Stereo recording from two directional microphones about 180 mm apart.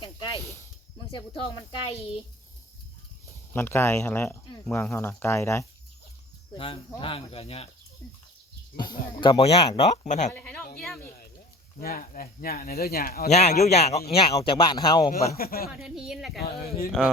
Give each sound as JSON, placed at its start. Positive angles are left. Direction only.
{"t": 0.0, "sound": "snake", "side_deg": 30}
{"t": 1.9, "sound": "speech", "side_deg": 35}
{"t": 3.5, "sound": "speech", "side_deg": 10}
{"t": 6.5, "sound": "speech", "side_deg": 25}
{"t": 8.7, "sound": "speech", "side_deg": 25}
{"t": 10.3, "sound": "speech", "side_deg": 10}
{"t": 11.8, "sound": "speech", "side_deg": 55}
{"t": 13.2, "sound": "speech", "side_deg": 40}
{"t": 15.1, "sound": "speech", "side_deg": 55}
{"t": 15.8, "sound": "speech", "side_deg": -5}